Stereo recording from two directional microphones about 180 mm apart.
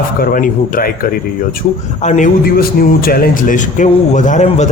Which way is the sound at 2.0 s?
45° left (ahead or behind).